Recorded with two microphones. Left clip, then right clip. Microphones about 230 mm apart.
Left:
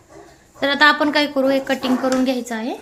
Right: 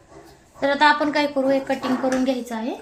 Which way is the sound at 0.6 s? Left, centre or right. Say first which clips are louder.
Left 3 dB; left.